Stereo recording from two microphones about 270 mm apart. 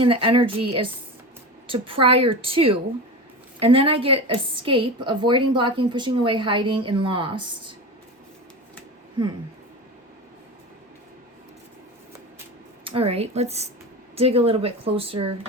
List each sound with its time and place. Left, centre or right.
0.0 s a woman's voice: centre
12.8 s speech: centre